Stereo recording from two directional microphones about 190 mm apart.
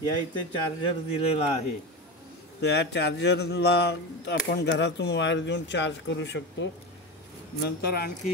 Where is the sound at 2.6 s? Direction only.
60° left (ahead or behind).